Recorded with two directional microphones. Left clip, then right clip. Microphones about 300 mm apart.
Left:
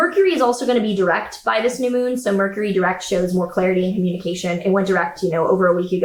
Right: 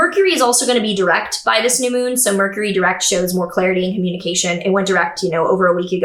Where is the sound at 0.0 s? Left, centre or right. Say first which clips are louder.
Right 2 dB; centre.